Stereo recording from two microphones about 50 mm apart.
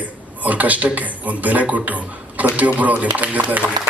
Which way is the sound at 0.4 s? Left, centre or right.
Right.